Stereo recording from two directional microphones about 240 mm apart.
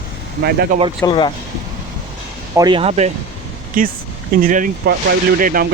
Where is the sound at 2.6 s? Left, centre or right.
Centre.